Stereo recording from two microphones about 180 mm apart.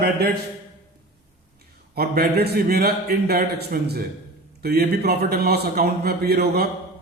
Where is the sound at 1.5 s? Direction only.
60° right (ahead or behind).